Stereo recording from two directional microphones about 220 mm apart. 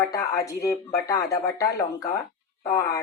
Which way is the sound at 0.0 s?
15° left (ahead or behind).